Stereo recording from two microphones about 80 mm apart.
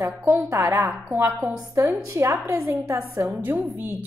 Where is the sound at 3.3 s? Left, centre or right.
Right.